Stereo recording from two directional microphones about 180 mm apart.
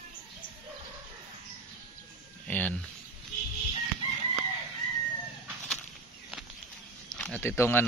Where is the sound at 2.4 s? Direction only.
10° left (ahead or behind).